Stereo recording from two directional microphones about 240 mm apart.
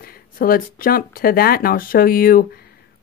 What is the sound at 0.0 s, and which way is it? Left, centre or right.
Speech, left.